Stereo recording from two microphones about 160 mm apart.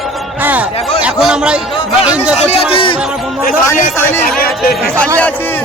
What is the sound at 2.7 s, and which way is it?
Speech, 35° left (ahead or behind).